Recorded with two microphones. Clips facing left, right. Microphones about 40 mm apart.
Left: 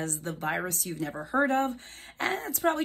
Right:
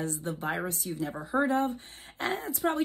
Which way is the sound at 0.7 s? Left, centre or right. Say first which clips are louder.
Even; left.